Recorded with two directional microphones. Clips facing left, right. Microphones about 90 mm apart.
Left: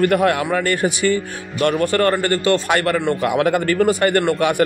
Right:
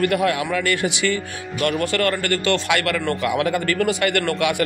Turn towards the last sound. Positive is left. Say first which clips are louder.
# left 4 dB
turn(degrees=40)  # may be behind; listen again after turning